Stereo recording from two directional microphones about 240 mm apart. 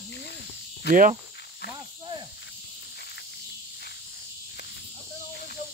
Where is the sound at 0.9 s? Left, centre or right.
Right.